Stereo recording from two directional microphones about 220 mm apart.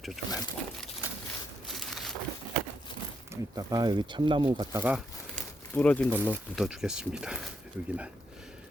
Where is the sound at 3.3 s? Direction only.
15° right (ahead or behind).